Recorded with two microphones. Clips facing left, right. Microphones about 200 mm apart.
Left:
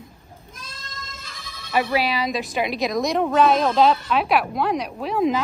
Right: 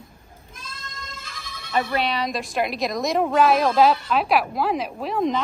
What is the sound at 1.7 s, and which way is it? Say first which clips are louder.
A woman's voice: left 2 dB; 5° left (ahead or behind).